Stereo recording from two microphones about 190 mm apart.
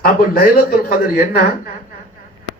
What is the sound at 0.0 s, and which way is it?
A man's voice, 50° left (ahead or behind).